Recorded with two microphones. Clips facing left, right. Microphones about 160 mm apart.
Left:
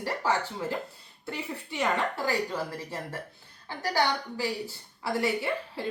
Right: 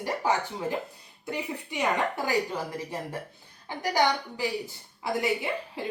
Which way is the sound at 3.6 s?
15° right (ahead or behind).